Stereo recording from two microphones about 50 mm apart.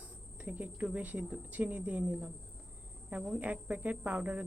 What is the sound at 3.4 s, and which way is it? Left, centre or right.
A woman's voice, right.